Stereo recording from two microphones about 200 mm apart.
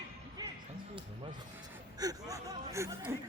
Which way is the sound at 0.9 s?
25° right (ahead or behind).